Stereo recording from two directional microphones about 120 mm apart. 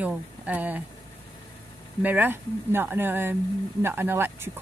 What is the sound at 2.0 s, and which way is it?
Speech, 15° right (ahead or behind).